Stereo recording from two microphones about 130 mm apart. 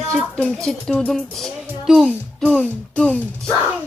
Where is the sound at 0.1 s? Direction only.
5° left (ahead or behind).